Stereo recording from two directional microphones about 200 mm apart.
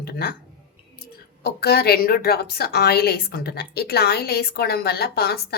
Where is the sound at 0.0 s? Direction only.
50° left (ahead or behind).